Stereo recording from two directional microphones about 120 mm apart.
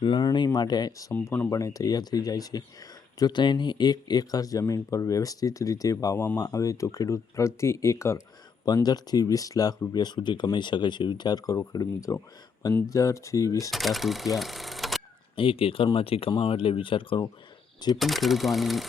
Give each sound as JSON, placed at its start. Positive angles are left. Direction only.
{"t": 0.0, "sound": "speech", "side_deg": 40}
{"t": 13.7, "sound": "speech", "side_deg": 0}
{"t": 15.4, "sound": "speech", "side_deg": 50}
{"t": 17.9, "sound": "speech", "side_deg": 0}